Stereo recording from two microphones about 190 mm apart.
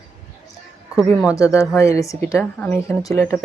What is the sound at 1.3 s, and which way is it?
Speech, 15° left (ahead or behind).